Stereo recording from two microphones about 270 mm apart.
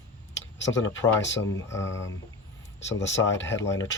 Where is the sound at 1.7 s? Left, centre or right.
Centre.